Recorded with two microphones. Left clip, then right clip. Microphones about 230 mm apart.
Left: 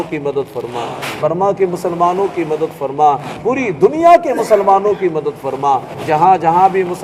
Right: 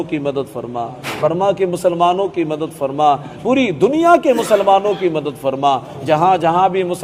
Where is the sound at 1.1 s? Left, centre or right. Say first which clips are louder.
Even; centre.